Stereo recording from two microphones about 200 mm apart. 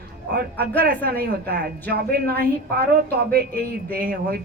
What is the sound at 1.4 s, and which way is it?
Speech, 50° right (ahead or behind).